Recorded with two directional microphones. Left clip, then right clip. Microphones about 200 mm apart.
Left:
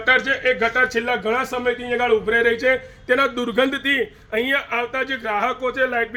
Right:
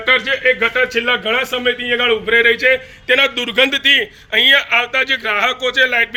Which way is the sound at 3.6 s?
35° left (ahead or behind).